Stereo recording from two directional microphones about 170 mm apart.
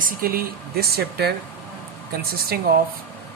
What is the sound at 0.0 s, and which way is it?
Speech, 60° right (ahead or behind).